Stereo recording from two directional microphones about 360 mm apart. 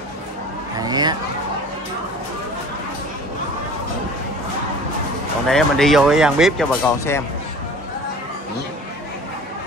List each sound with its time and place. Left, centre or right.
0.7 s speech: centre
5.5 s speech: centre